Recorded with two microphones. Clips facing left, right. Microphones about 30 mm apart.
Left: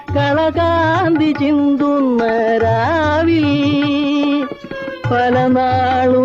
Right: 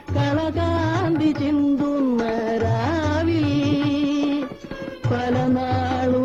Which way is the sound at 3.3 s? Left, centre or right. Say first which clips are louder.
Left 7 dB; left.